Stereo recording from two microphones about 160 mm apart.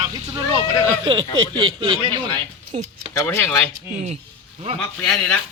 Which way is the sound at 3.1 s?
15° left (ahead or behind).